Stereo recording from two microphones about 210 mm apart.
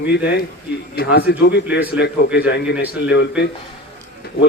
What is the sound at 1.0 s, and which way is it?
Speech, 50° left (ahead or behind).